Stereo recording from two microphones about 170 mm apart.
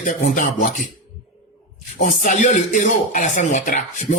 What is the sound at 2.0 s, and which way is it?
Speech, 45° left (ahead or behind).